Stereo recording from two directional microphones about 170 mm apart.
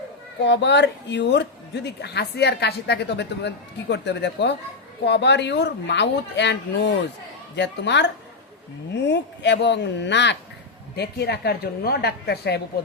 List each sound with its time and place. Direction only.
0.4 s a woman's voice: 90° left
10.9 s a woman's voice: 70° left (ahead or behind)